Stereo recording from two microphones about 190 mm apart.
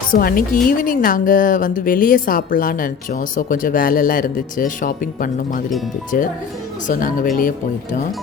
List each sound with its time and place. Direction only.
0.1 s a woman's voice: 50° left (ahead or behind)